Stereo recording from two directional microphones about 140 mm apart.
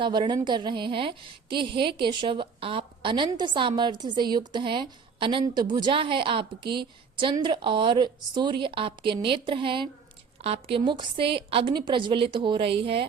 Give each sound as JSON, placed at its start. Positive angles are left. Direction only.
{"t": 0.0, "sound": "a woman's voice", "side_deg": -35}